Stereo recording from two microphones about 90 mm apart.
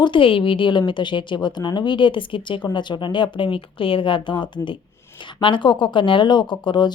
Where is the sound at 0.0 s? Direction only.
70° left (ahead or behind).